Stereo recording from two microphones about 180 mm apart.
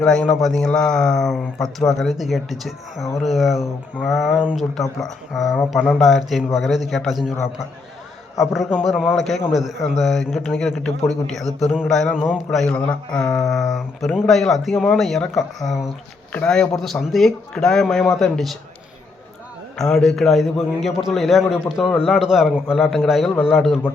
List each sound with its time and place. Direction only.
0.0 s a man's voice: 5° left (ahead or behind)
8.4 s a man's voice: centre (ahead or behind)
19.7 s a man's voice: centre (ahead or behind)